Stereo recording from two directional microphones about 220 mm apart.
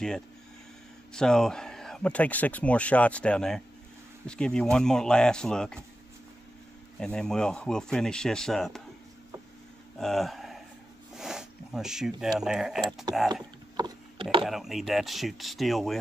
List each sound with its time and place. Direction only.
1.1 s a man's voice: 5° left (ahead or behind)
7.0 s a man's voice: 5° left (ahead or behind)
9.9 s speech: centre (ahead or behind)
13.3 s a sound: 20° right (ahead or behind)
14.4 s a man's voice: centre (ahead or behind)